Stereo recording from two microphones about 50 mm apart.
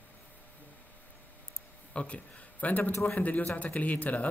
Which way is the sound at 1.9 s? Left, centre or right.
Left.